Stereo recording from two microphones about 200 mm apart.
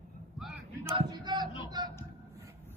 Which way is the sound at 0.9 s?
20° right (ahead or behind).